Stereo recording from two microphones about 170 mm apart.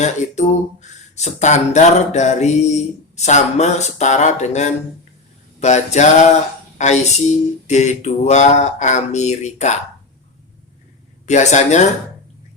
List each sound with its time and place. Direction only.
0.0 s speech: 45° left (ahead or behind)
11.3 s speech: 45° left (ahead or behind)